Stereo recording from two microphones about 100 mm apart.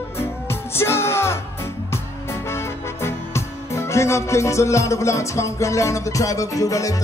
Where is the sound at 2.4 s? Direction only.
25° left (ahead or behind).